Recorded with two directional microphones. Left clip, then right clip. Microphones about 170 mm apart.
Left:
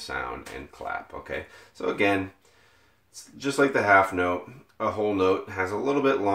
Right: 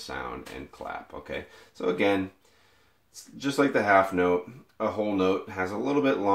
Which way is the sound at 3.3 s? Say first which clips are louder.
Left 2 dB; 25° right (ahead or behind).